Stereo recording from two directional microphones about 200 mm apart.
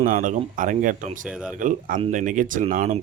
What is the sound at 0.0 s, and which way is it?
Speech, 40° right (ahead or behind).